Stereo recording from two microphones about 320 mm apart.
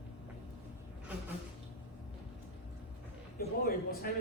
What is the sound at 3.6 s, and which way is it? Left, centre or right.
Speech, left.